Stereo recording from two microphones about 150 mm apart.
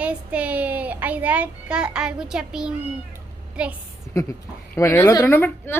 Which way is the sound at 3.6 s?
5° right (ahead or behind).